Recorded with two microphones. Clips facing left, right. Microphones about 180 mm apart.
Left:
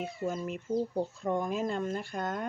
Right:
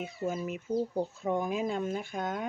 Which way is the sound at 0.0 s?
5° right (ahead or behind).